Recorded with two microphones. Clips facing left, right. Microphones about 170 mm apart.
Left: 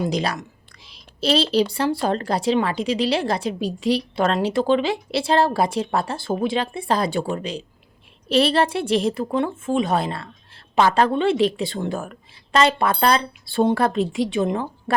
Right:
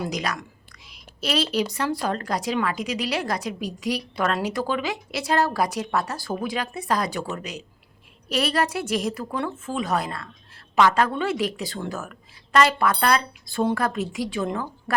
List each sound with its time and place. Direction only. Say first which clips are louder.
0.0 s a woman's voice: left 5 dB; 30° left (ahead or behind)
0.9 s a sound: left 7 dB; 30° left (ahead or behind)
1.5 s a woman's voice: left 5 dB; 30° left (ahead or behind)